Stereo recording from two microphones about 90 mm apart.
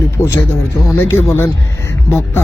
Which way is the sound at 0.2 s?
30° left (ahead or behind).